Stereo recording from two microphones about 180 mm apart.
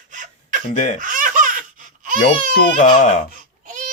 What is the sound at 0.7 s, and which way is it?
Speech, 40° left (ahead or behind).